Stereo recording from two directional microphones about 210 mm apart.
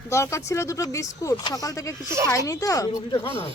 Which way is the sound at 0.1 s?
15° left (ahead or behind).